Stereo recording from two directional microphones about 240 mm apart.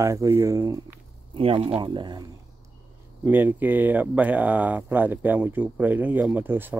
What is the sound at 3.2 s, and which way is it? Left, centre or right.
Speech, centre.